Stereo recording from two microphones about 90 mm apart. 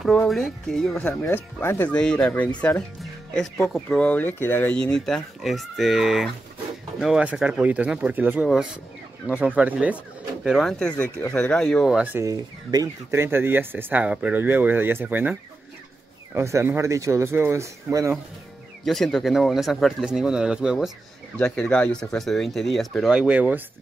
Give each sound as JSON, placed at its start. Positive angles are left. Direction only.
{"t": 0.3, "sound": "speech", "side_deg": 0}
{"t": 1.2, "sound": "speech", "side_deg": 30}
{"t": 1.9, "sound": "speech", "side_deg": 10}
{"t": 3.6, "sound": "speech", "side_deg": 5}
{"t": 4.1, "sound": "speech", "side_deg": 20}
{"t": 4.7, "sound": "speech", "side_deg": 10}
{"t": 10.4, "sound": "speech", "side_deg": 0}
{"t": 12.2, "sound": "speech", "side_deg": -40}
{"t": 13.1, "sound": "speech", "side_deg": -25}
{"t": 16.3, "sound": "speech", "side_deg": -30}
{"t": 18.9, "sound": "speech", "side_deg": 5}
{"t": 21.4, "sound": "speech", "side_deg": 10}
{"t": 23.1, "sound": "speech", "side_deg": -10}